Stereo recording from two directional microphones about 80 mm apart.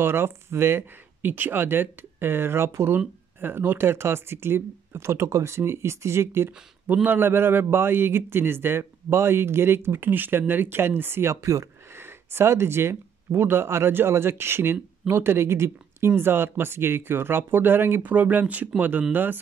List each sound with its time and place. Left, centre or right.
0.0 s a man's voice: right
6.9 s a man's voice: right